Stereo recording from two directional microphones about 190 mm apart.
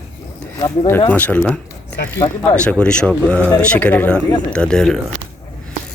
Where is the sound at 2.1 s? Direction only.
20° left (ahead or behind).